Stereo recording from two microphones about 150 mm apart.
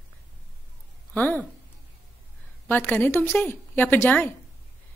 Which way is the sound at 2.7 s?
10° left (ahead or behind).